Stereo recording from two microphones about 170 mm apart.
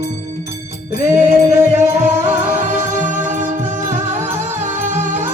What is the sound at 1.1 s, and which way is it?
Music, 15° right (ahead or behind).